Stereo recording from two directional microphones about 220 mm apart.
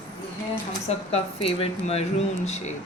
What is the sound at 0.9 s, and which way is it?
Speech, 30° left (ahead or behind).